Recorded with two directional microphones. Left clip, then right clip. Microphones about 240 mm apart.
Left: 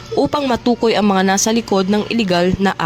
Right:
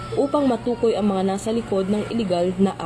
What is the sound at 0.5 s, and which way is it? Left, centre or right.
Speech, left.